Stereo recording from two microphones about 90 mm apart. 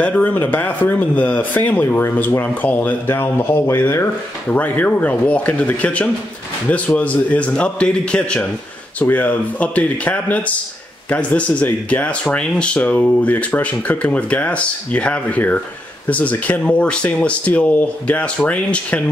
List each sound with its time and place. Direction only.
0.0 s speech: 15° left (ahead or behind)